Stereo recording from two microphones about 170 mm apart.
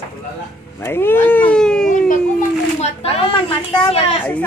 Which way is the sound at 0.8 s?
15° left (ahead or behind).